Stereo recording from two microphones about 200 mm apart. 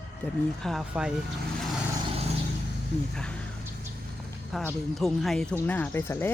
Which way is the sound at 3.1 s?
5° left (ahead or behind).